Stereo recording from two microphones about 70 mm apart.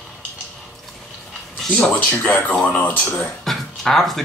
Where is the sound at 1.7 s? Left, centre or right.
Left.